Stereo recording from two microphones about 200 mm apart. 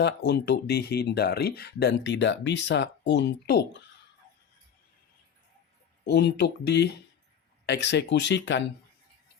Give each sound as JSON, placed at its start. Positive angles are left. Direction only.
{"t": 0.0, "sound": "speech", "side_deg": 55}
{"t": 6.1, "sound": "speech", "side_deg": 55}